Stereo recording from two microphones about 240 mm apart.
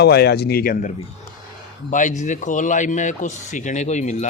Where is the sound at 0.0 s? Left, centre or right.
Left.